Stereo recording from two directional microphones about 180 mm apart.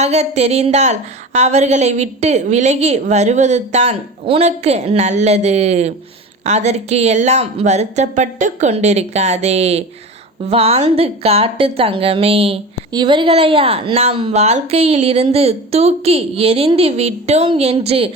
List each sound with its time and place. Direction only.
0.0 s speech: 35° right (ahead or behind)